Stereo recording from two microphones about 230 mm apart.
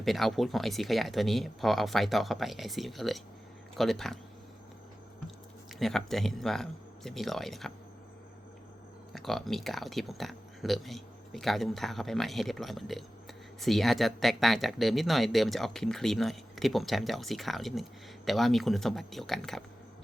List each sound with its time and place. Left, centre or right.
0.0 s speech: centre
5.8 s speech: centre
9.1 s speech: centre